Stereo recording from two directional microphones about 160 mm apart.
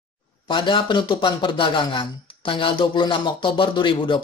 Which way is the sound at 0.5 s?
30° left (ahead or behind).